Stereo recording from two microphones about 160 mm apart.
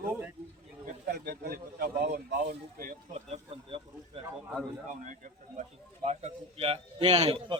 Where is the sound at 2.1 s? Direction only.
80° right.